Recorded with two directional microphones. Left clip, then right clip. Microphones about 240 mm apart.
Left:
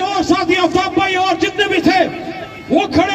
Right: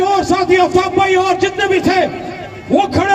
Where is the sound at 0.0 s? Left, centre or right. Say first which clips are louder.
Right 2 dB; right.